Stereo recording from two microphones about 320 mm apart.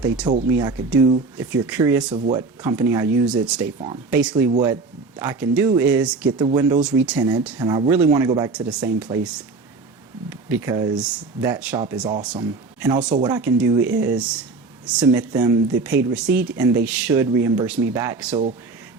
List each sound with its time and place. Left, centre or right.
0.4 s speech: centre
2.1 s speech: centre